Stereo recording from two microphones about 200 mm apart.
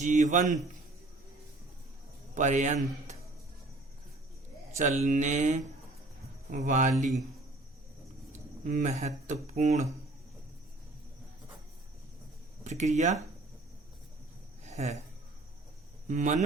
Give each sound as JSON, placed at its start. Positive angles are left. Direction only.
{"t": 0.0, "sound": "a man's voice", "side_deg": -40}
{"t": 2.3, "sound": "a man's voice", "side_deg": -40}
{"t": 4.8, "sound": "a man's voice", "side_deg": -35}
{"t": 8.3, "sound": "speech", "side_deg": -40}
{"t": 12.6, "sound": "a man's voice", "side_deg": -35}
{"t": 14.6, "sound": "a sound", "side_deg": -35}
{"t": 16.0, "sound": "a man's voice", "side_deg": -40}